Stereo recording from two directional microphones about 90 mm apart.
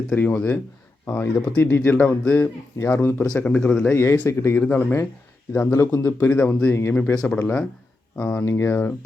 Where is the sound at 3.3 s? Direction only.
15° left (ahead or behind).